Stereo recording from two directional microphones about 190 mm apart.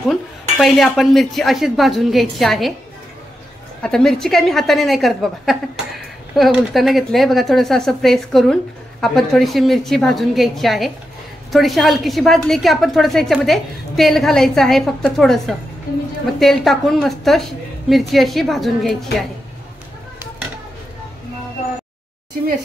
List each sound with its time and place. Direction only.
0.1 s a woman's voice: centre (ahead or behind)
3.8 s a woman's voice: 5° left (ahead or behind)